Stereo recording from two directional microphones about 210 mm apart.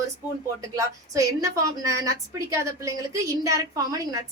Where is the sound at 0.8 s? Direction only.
15° right (ahead or behind).